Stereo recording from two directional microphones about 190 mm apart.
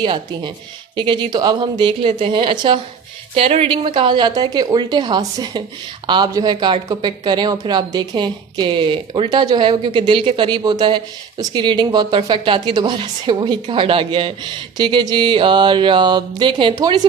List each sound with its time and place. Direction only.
0.0 s speech: 25° right (ahead or behind)